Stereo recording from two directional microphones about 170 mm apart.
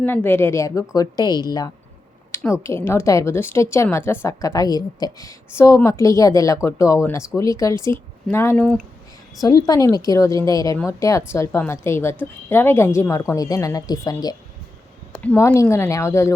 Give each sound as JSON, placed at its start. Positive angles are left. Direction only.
{"t": 0.0, "sound": "a woman's voice", "side_deg": 10}